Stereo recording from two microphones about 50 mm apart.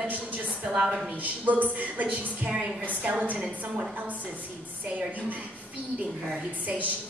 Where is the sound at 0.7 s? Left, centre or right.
Centre.